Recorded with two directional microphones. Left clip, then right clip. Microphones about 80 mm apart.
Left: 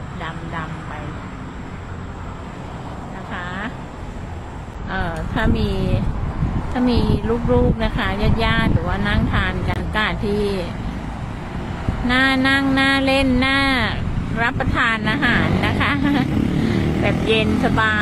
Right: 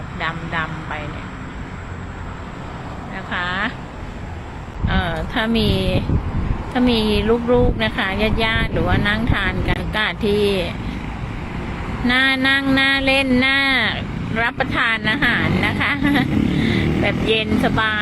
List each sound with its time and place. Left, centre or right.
0.2 s vehicle: right
3.3 s vehicle: right
4.9 s a sound: centre
5.3 s a woman's voice: centre
6.7 s speech: centre
12.0 s speech: centre
15.6 s vehicle: centre
17.2 s speech: centre